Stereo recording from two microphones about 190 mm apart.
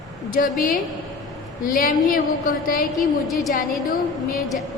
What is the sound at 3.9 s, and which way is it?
Speech, 45° left (ahead or behind).